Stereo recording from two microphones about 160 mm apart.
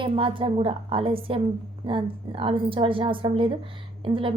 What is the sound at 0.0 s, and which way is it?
A woman's voice, 30° right (ahead or behind).